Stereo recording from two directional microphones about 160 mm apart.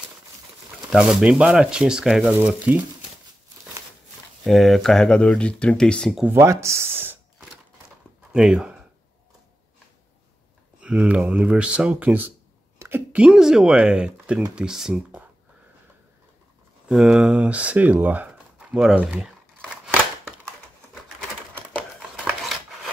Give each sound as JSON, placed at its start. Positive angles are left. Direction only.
{"t": 0.8, "sound": "speech", "side_deg": -5}
{"t": 4.5, "sound": "speech", "side_deg": 0}
{"t": 6.2, "sound": "a sound", "side_deg": -15}
{"t": 8.3, "sound": "speech", "side_deg": -5}
{"t": 10.8, "sound": "speech", "side_deg": -5}
{"t": 16.9, "sound": "speech", "side_deg": -5}